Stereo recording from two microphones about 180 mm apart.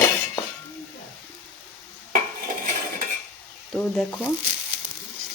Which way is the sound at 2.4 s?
50° right (ahead or behind).